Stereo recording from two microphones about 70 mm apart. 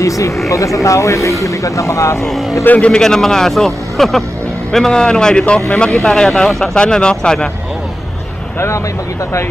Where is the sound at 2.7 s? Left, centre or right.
Centre.